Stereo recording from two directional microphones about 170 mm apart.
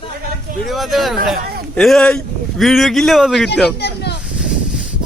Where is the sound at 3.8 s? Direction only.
75° left (ahead or behind).